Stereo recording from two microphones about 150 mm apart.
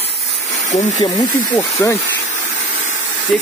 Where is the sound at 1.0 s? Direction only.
25° left (ahead or behind).